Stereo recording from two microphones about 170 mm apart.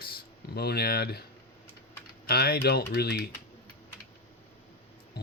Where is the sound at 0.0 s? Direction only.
65° left (ahead or behind).